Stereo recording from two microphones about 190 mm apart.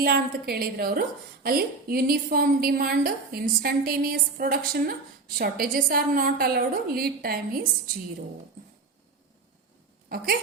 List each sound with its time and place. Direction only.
0.0 s a woman's voice: 55° right (ahead or behind)